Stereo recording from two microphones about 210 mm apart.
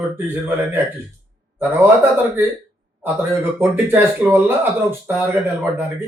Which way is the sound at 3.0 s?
10° right (ahead or behind).